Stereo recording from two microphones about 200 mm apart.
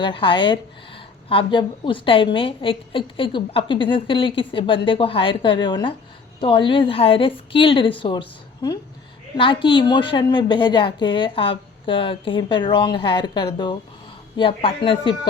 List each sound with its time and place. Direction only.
0.0 s a woman's voice: 25° left (ahead or behind)